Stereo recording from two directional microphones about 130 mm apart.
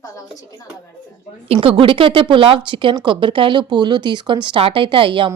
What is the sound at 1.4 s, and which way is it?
A woman's voice, 45° right (ahead or behind).